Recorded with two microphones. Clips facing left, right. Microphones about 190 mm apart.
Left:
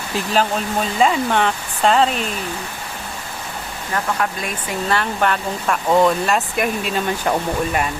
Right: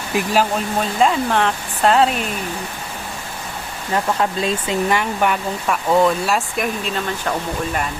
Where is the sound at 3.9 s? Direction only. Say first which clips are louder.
Right 3 dB; 25° right (ahead or behind).